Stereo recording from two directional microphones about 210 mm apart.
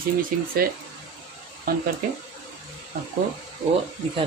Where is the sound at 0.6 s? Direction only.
40° right (ahead or behind).